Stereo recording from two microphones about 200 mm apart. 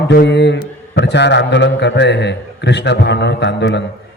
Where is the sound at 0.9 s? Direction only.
60° left (ahead or behind).